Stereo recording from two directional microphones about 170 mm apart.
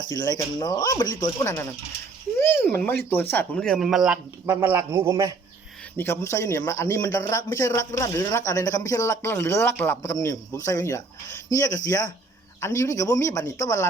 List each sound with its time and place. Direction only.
0.1 s speech: 20° left (ahead or behind); by 5.3 s 20° right (ahead or behind)
6.0 s speech: 15° left (ahead or behind)